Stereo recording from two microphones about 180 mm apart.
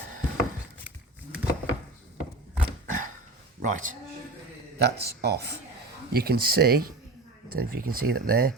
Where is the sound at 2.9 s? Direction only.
50° right (ahead or behind).